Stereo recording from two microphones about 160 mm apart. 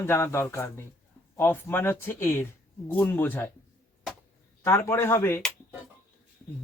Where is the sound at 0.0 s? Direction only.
15° left (ahead or behind).